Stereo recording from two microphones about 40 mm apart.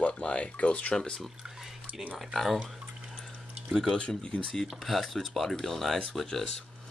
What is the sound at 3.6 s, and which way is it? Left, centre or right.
Speech, centre.